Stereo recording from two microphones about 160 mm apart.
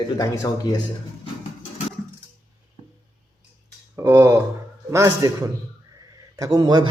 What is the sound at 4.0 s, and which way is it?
A man's voice, 15° right (ahead or behind).